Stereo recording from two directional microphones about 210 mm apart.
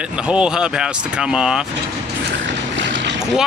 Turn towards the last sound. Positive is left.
turn(degrees=-60)  # may be behind; listen again after turning